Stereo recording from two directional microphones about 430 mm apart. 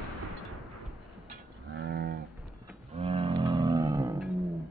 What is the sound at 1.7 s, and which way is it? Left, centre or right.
Livestock, right.